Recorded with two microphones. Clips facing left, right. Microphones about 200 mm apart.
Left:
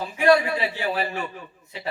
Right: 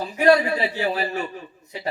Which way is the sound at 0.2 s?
40° right (ahead or behind).